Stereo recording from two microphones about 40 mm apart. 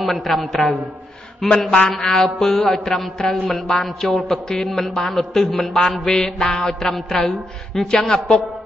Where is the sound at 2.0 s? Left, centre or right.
Centre.